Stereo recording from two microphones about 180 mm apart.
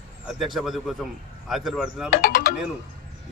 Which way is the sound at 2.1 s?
60° left (ahead or behind).